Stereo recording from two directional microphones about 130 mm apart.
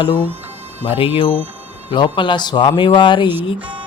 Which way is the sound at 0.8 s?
40° left (ahead or behind).